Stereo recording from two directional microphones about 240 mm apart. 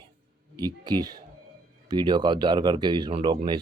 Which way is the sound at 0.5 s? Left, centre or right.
Centre.